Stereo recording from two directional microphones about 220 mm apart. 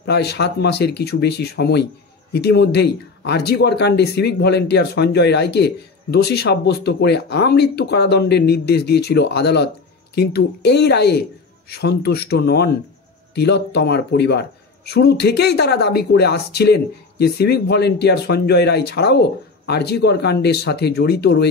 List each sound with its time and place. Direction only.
0.0 s speech: 50° left (ahead or behind)